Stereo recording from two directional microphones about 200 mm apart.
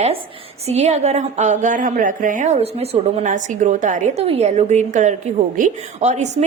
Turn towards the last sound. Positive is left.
turn(degrees=-35)  # may be behind; listen again after turning